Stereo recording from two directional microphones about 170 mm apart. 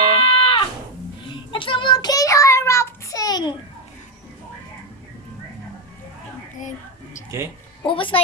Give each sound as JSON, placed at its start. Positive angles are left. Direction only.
{"t": 0.1, "sound": "a sound", "side_deg": 35}
{"t": 1.5, "sound": "child singing", "side_deg": 30}
{"t": 7.9, "sound": "a woman's voice", "side_deg": 30}